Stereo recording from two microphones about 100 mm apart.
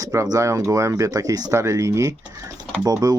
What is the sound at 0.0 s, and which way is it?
Speech, 35° right (ahead or behind).